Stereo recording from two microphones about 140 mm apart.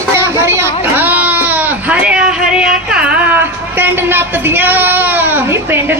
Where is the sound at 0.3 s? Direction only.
20° right (ahead or behind).